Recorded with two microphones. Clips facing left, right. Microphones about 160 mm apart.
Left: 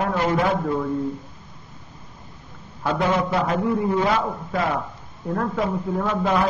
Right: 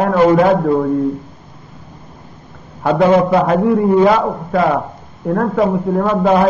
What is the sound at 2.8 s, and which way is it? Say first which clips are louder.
A man's voice: right 10 dB; 65° right (ahead or behind).